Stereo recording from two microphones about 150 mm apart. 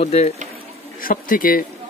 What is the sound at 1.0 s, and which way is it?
Speech, 65° left (ahead or behind).